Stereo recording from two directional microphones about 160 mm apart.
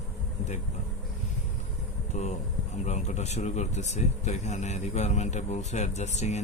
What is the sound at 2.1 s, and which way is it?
Speech, 45° left (ahead or behind).